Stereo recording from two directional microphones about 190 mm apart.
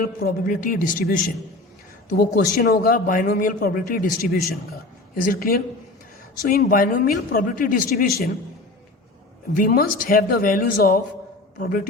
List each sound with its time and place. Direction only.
0.0 s a man's voice: 50° left (ahead or behind)
9.6 s a man's voice: 45° left (ahead or behind)